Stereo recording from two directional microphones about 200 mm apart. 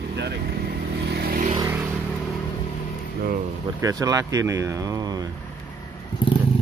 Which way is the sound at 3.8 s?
15° right (ahead or behind).